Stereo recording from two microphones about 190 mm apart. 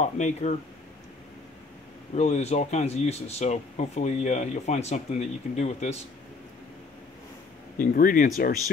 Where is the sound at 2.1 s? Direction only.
35° left (ahead or behind).